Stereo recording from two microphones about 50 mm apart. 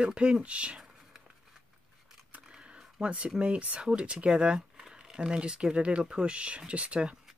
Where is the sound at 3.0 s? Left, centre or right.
Right.